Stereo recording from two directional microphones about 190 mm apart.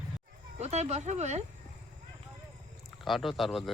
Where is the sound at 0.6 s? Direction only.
35° right (ahead or behind).